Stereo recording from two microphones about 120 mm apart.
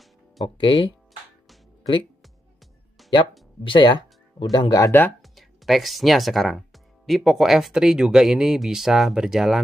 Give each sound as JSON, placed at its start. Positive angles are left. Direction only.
{"t": 0.6, "sound": "speech", "side_deg": 45}
{"t": 3.0, "sound": "music", "side_deg": 0}
{"t": 3.6, "sound": "speech", "side_deg": 40}
{"t": 5.2, "sound": "speech", "side_deg": 0}